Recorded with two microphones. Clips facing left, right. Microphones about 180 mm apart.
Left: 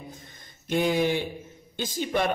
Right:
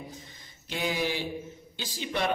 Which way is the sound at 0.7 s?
50° left (ahead or behind).